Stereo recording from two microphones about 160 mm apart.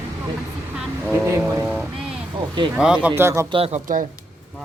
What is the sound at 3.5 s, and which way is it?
Speech, 40° right (ahead or behind).